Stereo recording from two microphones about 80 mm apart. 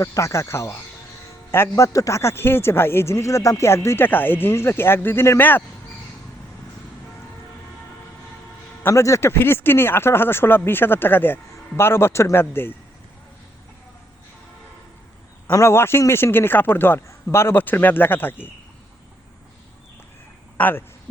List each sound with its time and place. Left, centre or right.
0.0 s a man's voice: left
8.8 s a man's voice: left
15.5 s a man's voice: left
20.6 s speech: left